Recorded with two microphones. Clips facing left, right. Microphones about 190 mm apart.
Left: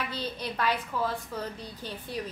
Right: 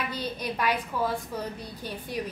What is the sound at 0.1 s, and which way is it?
A woman's voice, 10° right (ahead or behind).